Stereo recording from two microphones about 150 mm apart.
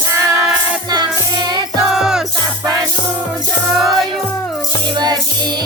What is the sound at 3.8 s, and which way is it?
Music, centre (ahead or behind).